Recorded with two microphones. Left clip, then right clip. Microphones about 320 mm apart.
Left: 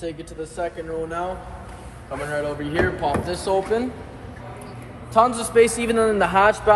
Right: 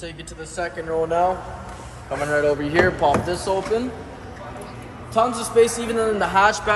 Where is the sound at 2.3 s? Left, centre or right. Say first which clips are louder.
Right 7 dB; right.